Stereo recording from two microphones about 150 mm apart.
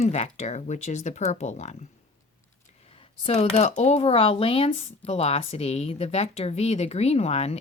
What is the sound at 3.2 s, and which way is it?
Speech, 40° left (ahead or behind).